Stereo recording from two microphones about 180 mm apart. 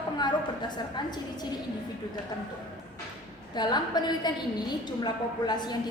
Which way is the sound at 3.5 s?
25° left (ahead or behind).